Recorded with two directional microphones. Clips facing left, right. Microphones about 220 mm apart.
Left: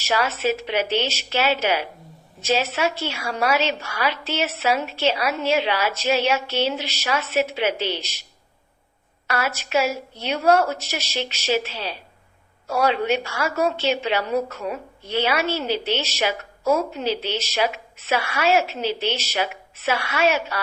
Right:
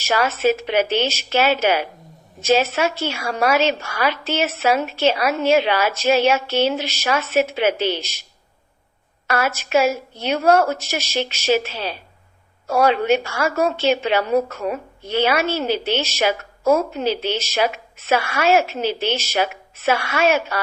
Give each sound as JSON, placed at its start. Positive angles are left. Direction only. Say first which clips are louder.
{"t": 0.0, "sound": "a woman's voice", "louder": "right 4 dB", "side_deg": -50}
{"t": 9.2, "sound": "a woman's voice", "louder": "right 4 dB", "side_deg": -50}